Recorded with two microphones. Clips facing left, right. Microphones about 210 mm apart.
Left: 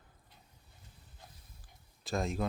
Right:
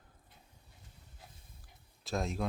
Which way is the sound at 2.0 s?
Centre (ahead or behind).